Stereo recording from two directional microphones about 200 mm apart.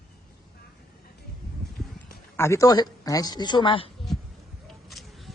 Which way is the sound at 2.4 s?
15° left (ahead or behind).